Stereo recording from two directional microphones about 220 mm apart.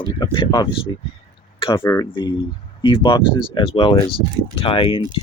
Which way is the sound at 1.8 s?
15° left (ahead or behind).